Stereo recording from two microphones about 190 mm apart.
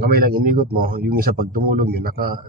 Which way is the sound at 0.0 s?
50° right (ahead or behind).